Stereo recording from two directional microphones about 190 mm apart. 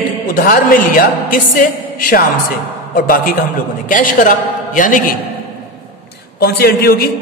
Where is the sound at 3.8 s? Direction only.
45° left (ahead or behind).